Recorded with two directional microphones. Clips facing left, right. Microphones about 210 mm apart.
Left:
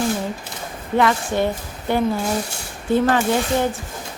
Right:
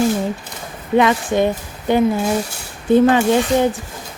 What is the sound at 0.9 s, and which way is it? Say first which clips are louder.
Speech: right 4 dB; 15° right (ahead or behind).